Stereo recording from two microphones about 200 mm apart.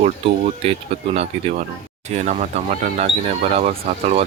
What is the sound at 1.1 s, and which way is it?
Speech, 30° right (ahead or behind).